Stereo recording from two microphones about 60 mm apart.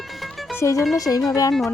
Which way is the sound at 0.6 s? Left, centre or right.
Left.